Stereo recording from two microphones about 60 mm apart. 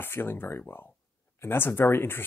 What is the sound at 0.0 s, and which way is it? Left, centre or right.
Speech, left.